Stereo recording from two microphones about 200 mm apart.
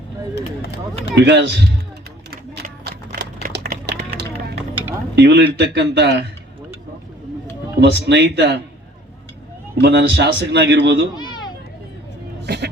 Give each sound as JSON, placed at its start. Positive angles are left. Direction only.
{"t": 1.1, "sound": "speech", "side_deg": -60}
{"t": 2.3, "sound": "typewriter", "side_deg": -50}
{"t": 3.4, "sound": "a sound", "side_deg": -55}
{"t": 5.1, "sound": "speech", "side_deg": -55}
{"t": 7.8, "sound": "speech", "side_deg": -60}
{"t": 9.8, "sound": "speech", "side_deg": -55}
{"t": 11.1, "sound": "a sound", "side_deg": 20}
{"t": 12.4, "sound": "music", "side_deg": -55}